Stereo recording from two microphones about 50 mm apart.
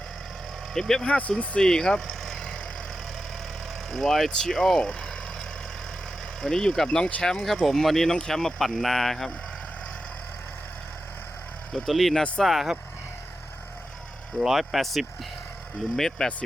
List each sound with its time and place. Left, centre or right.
0.7 s speech: centre
1.0 s speech: left
1.5 s vehicle: centre
3.9 s speech: centre
6.4 s speech: centre
11.7 s speech: centre
14.3 s speech: centre